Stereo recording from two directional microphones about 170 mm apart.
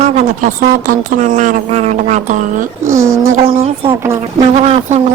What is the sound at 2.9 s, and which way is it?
Speech, 15° right (ahead or behind).